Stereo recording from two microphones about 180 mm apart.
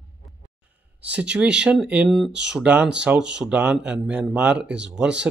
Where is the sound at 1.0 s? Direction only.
5° right (ahead or behind).